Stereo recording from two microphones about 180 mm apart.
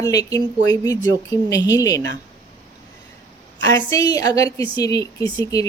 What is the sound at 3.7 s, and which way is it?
A woman's voice, 20° left (ahead or behind).